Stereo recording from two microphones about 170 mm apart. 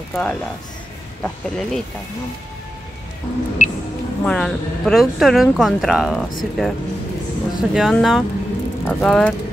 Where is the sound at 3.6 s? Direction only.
50° left (ahead or behind).